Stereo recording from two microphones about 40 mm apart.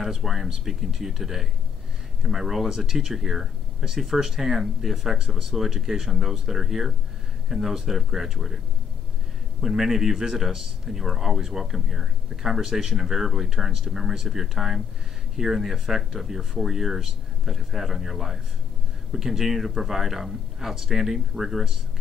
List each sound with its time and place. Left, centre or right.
0.0 s speech: centre
9.6 s speech: centre